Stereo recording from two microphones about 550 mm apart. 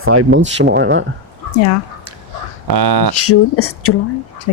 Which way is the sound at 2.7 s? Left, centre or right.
Right.